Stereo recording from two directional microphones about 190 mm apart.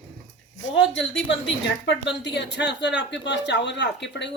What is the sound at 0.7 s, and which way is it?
A woman's voice, 75° left (ahead or behind).